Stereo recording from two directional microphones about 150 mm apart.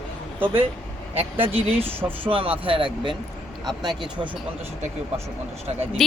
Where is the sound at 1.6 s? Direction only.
40° right (ahead or behind).